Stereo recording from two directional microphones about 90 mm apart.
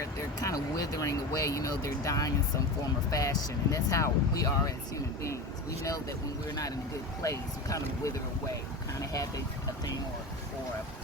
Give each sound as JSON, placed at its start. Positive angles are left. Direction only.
{"t": 0.0, "sound": "speech", "side_deg": 40}
{"t": 5.8, "sound": "speech", "side_deg": 40}